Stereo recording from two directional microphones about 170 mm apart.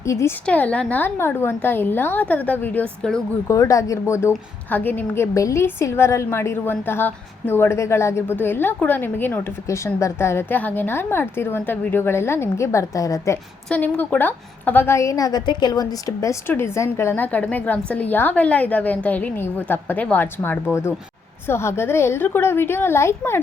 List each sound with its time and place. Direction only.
0.0 s a woman's voice: 15° left (ahead or behind)
3.4 s a woman's voice: 20° left (ahead or behind)